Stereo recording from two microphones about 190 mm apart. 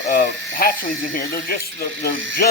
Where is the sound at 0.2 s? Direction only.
50° left (ahead or behind).